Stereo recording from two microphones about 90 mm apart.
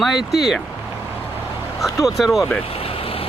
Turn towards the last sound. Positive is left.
turn(degrees=90)